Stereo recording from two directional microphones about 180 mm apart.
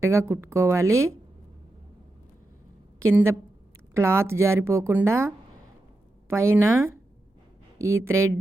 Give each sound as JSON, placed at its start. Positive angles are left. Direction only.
{"t": 0.0, "sound": "a woman's voice", "side_deg": -15}
{"t": 3.0, "sound": "a woman's voice", "side_deg": -15}
{"t": 7.8, "sound": "a woman's voice", "side_deg": -15}